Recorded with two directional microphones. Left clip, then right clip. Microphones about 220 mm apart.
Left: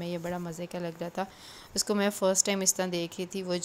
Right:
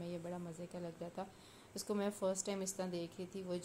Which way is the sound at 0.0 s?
30° left (ahead or behind).